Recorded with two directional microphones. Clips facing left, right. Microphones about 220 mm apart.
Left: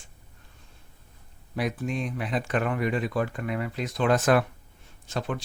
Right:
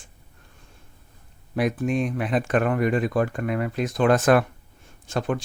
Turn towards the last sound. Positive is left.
turn(degrees=-50)  # may be behind; listen again after turning